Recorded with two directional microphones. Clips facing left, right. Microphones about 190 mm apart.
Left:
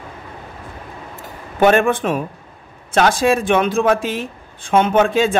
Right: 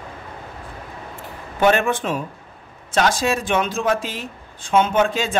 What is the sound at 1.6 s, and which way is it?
Speech, 50° left (ahead or behind).